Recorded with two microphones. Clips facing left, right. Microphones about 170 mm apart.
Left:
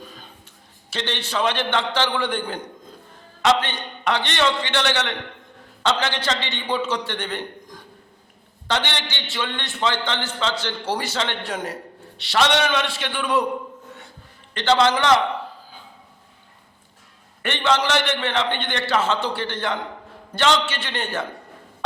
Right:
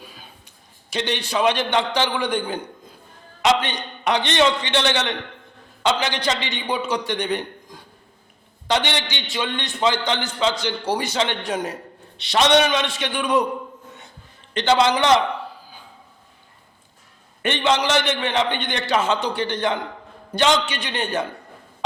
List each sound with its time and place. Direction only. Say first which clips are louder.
0.9 s a man's voice: right 3 dB; 15° right (ahead or behind)
14.5 s a man's voice: right 1 dB; 15° right (ahead or behind)
17.4 s a man's voice: right 1 dB; 20° right (ahead or behind)